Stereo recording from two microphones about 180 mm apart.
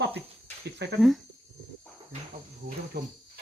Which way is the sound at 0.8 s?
70° right (ahead or behind).